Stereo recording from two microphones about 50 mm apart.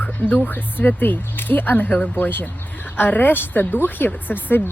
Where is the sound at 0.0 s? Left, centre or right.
Left.